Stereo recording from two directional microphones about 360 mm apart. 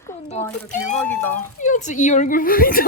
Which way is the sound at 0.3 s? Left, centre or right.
Centre.